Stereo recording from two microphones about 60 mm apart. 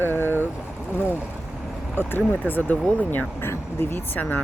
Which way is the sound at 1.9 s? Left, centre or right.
Left.